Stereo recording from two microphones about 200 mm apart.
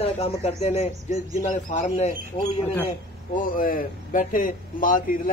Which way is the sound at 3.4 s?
45° left (ahead or behind).